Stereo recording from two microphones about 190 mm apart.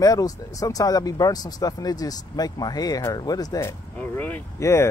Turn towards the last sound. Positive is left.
turn(degrees=15)  # may be behind; listen again after turning